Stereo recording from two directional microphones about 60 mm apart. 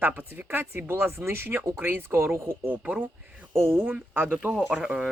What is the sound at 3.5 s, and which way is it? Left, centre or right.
Speech, right.